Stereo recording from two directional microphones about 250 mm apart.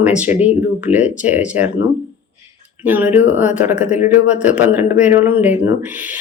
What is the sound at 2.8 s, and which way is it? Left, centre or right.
Speech, centre.